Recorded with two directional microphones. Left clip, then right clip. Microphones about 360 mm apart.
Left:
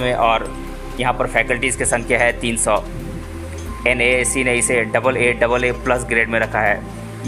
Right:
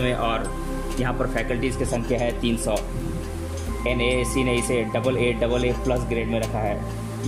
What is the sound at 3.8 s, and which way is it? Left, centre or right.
Speech, left.